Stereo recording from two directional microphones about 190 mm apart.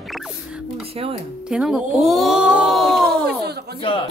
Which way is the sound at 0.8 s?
30° right (ahead or behind).